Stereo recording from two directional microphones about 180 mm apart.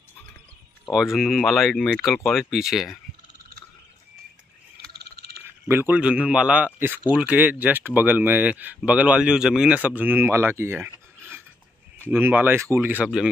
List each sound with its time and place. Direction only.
0.8 s speech: centre (ahead or behind)
4.9 s a sound: 60° right (ahead or behind)
5.7 s speech: 10° right (ahead or behind)